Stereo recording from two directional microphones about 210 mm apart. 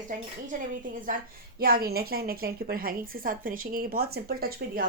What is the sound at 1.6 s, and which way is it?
A woman's voice, 45° right (ahead or behind).